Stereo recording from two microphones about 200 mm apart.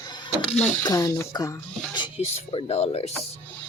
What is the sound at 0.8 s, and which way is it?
Speech, 20° left (ahead or behind).